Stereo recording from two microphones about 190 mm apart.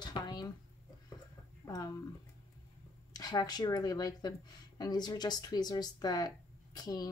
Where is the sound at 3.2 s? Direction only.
20° left (ahead or behind).